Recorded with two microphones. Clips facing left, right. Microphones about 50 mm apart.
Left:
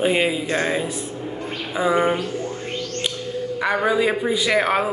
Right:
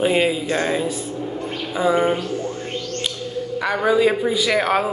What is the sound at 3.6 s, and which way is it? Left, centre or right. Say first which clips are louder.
A man's voice: right 2 dB; centre.